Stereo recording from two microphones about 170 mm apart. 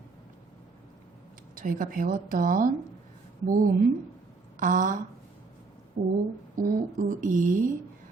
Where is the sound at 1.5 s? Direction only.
55° right (ahead or behind).